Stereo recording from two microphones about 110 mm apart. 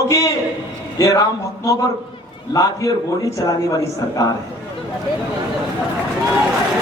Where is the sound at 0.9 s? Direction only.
30° left (ahead or behind).